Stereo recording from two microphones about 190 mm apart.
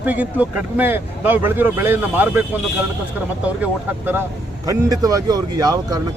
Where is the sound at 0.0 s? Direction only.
10° right (ahead or behind).